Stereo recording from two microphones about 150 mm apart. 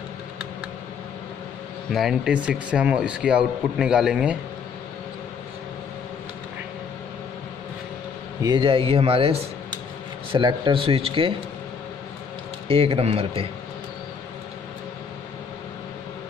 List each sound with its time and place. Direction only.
1.9 s speech: centre (ahead or behind)
8.4 s speech: 30° right (ahead or behind)
12.6 s speech: 40° right (ahead or behind)